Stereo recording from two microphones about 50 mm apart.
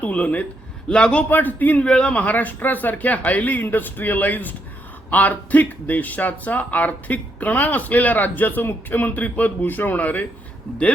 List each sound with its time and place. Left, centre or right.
0.0 s a man's voice: left
1.3 s speech: left
1.8 s a man's voice: centre
2.1 s speech: left